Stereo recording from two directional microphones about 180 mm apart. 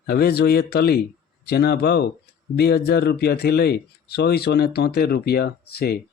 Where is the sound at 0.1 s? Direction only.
60° left (ahead or behind).